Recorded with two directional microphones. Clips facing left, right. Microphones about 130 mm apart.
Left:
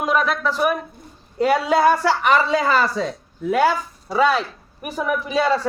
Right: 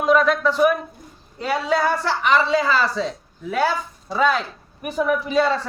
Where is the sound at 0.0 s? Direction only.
5° left (ahead or behind).